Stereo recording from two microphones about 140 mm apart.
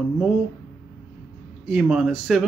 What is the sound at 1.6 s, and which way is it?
Speech, 5° right (ahead or behind).